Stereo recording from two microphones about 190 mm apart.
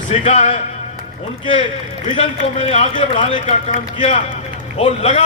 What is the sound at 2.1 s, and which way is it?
A man's voice, 30° left (ahead or behind).